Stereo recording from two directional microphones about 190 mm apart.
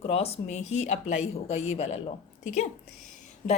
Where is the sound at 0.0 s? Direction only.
30° left (ahead or behind).